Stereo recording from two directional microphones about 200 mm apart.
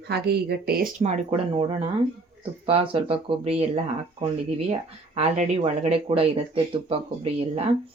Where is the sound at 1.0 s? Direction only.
30° right (ahead or behind).